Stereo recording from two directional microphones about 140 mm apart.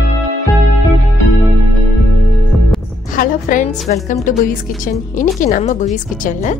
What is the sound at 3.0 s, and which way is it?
A woman's voice, 75° left (ahead or behind).